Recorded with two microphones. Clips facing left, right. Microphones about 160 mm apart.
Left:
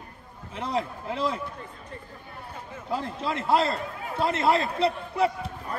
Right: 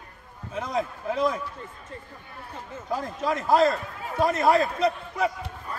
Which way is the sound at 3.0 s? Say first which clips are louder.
Right 2 dB; 30° left (ahead or behind).